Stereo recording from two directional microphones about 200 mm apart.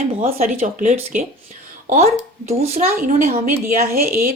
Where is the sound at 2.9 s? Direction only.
45° right (ahead or behind).